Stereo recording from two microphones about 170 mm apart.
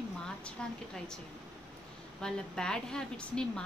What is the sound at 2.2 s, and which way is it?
A woman's voice, 5° left (ahead or behind).